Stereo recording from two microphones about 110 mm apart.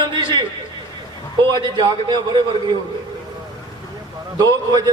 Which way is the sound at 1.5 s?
40° right (ahead or behind).